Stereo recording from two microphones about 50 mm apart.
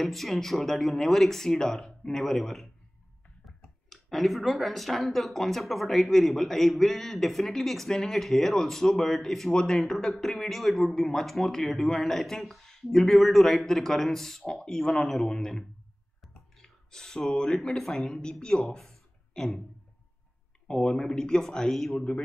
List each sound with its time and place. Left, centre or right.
0.0 s a man's voice: centre
3.4 s clicking: centre
3.9 s a man's voice: centre
16.2 s a sound: centre
17.6 s a man's voice: centre
20.6 s a man's voice: centre
21.9 s speech: centre